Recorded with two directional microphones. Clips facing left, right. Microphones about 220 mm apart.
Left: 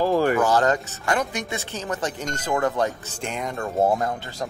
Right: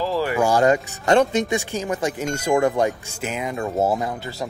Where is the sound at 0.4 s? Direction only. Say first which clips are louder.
Right 3 dB; 10° right (ahead or behind).